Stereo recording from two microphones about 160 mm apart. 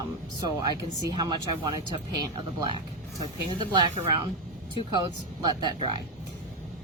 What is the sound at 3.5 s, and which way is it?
Speech, 30° right (ahead or behind).